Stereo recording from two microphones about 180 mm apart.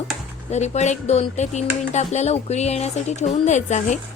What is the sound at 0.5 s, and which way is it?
Speech, 40° left (ahead or behind).